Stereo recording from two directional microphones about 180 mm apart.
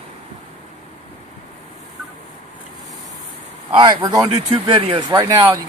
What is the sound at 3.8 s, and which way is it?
Speech, 25° right (ahead or behind).